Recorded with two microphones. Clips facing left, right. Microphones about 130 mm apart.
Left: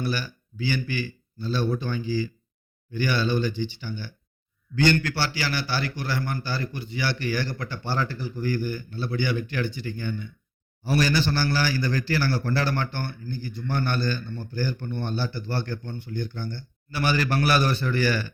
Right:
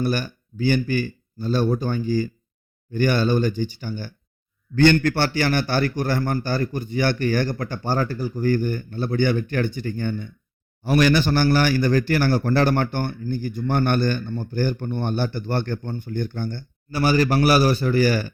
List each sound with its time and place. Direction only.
0.0 s a man's voice: 50° right (ahead or behind)